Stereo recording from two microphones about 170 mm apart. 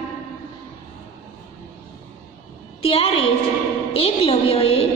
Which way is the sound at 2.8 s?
35° left (ahead or behind).